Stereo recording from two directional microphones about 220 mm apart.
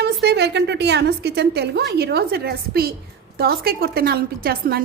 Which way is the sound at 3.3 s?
45° right (ahead or behind).